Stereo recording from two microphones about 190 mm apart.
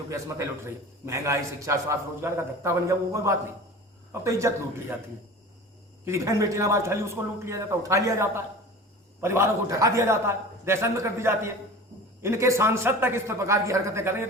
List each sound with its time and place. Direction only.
0.1 s a man's voice: 15° right (ahead or behind)
6.1 s a man's voice: 15° right (ahead or behind)